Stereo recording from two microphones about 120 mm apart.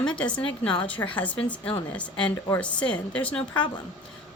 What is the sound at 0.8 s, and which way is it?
A woman's voice, 10° left (ahead or behind).